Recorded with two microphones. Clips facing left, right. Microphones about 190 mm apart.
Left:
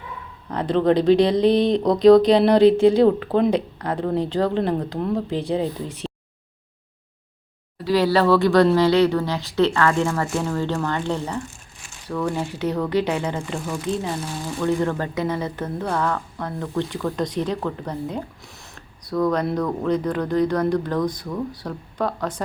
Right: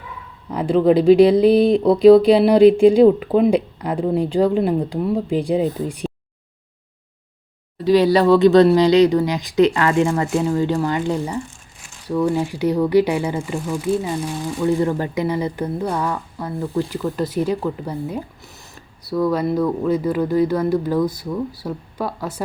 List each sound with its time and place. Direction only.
0.5 s speech: 10° right (ahead or behind)
7.9 s speech: 20° right (ahead or behind)